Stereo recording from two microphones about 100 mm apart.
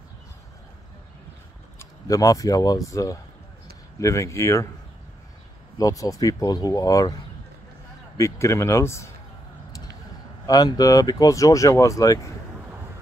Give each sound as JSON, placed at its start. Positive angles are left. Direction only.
{"t": 1.8, "sound": "speech", "side_deg": 35}
{"t": 5.8, "sound": "speech", "side_deg": 35}
{"t": 8.2, "sound": "a man's voice", "side_deg": 30}
{"t": 10.4, "sound": "speech", "side_deg": 40}